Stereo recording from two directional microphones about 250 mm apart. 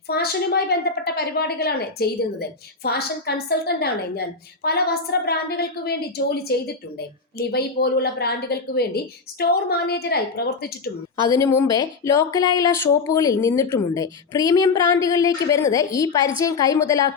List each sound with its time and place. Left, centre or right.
0.1 s a woman's voice: left
11.3 s speech: centre